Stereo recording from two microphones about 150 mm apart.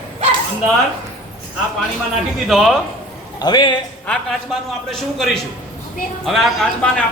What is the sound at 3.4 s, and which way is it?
Speech, 30° left (ahead or behind).